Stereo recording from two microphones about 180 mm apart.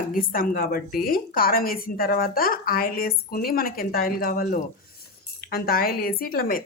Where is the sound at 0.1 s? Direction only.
50° left (ahead or behind).